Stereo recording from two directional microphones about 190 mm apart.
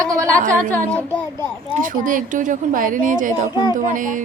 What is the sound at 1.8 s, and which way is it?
Speech, 45° right (ahead or behind).